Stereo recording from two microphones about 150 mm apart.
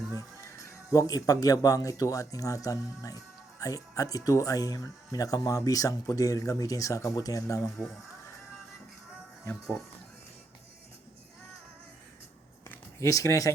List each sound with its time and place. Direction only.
0.5 s speech: 20° left (ahead or behind)
9.5 s speech: 5° left (ahead or behind)
12.6 s a sound: 15° left (ahead or behind)